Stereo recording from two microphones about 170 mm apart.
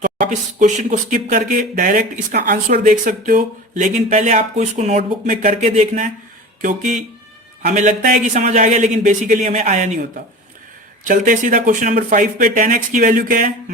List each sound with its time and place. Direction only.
0.0 s speech: 50° right (ahead or behind)
11.0 s speech: 50° right (ahead or behind)